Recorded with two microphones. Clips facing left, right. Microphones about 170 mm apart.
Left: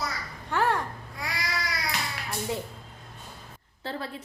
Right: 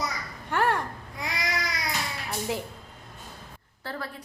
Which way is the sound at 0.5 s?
Centre (ahead or behind).